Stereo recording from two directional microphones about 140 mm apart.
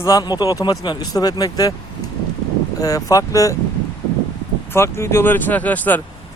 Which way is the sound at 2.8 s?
25° left (ahead or behind).